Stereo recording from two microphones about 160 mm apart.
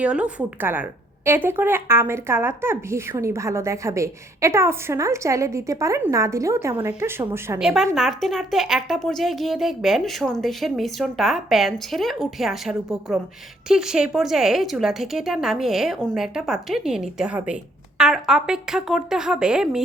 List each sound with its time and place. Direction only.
0.0 s a woman's voice: 5° right (ahead or behind)
7.6 s a woman's voice: 5° right (ahead or behind)